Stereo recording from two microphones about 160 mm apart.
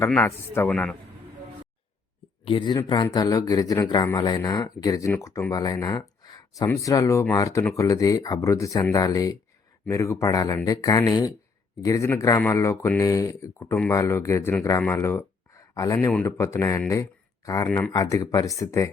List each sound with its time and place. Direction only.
0.3 s speech: 15° left (ahead or behind)
0.7 s a man's voice: 5° left (ahead or behind)
2.5 s speech: 30° left (ahead or behind)
16.0 s speech: 10° left (ahead or behind)
16.9 s a sound: 20° left (ahead or behind)
17.7 s speech: 10° left (ahead or behind)
17.9 s speech: 20° left (ahead or behind)